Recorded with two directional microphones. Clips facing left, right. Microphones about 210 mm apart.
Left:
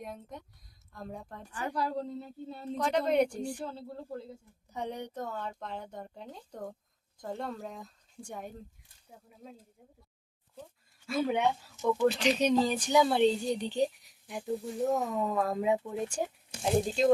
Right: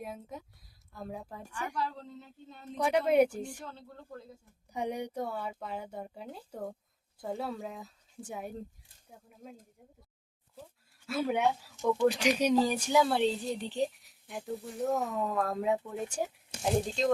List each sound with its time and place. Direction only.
0.0 s a woman's voice: 5° right (ahead or behind)
1.5 s a woman's voice: 35° left (ahead or behind)
2.7 s speech: 10° right (ahead or behind)
3.6 s a woman's voice: 30° left (ahead or behind)
4.7 s a woman's voice: 10° right (ahead or behind)
12.0 s a woman's voice: 10° right (ahead or behind); by 17.1 s 5° left (ahead or behind)